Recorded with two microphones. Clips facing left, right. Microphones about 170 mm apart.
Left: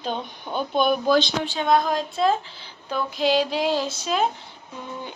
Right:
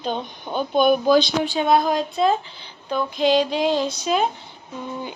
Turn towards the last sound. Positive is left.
turn(degrees=0)  # may be behind; listen again after turning